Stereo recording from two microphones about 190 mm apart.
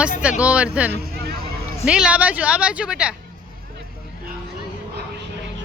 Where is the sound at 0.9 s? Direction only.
55° right (ahead or behind).